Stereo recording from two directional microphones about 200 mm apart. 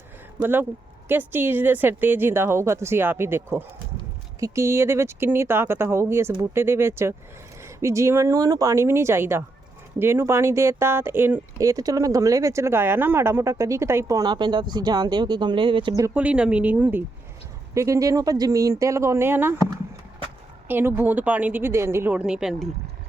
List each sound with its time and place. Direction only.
0.3 s speech: 10° right (ahead or behind)
16.0 s speech: 5° right (ahead or behind)
20.7 s speech: 10° right (ahead or behind)